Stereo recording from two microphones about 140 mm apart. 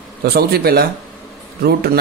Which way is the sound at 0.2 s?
90° right.